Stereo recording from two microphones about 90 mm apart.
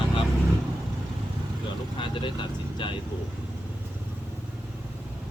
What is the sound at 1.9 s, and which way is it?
Speech, 65° left (ahead or behind).